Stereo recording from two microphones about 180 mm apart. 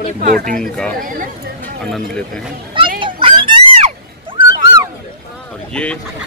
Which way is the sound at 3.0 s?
30° right (ahead or behind).